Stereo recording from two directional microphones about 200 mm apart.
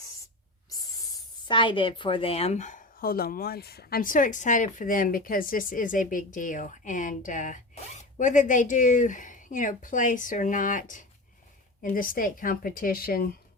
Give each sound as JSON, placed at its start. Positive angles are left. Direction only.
{"t": 0.7, "sound": "a woman's voice", "side_deg": 20}